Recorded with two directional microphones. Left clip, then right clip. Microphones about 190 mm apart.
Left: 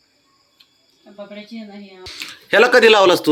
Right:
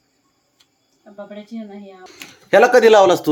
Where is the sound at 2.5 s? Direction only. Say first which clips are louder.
Right 1 dB; 10° right (ahead or behind).